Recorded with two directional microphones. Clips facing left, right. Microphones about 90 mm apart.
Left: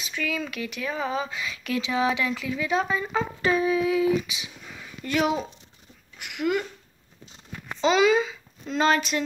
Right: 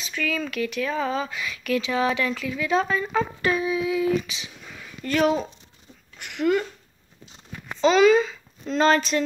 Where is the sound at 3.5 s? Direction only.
40° left (ahead or behind).